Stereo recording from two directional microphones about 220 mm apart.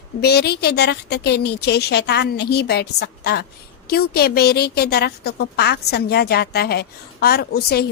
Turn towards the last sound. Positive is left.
turn(degrees=45)  # may be behind; listen again after turning